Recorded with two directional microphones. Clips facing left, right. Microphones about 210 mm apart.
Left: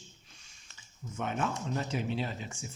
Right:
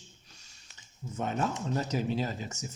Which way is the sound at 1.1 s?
35° right (ahead or behind).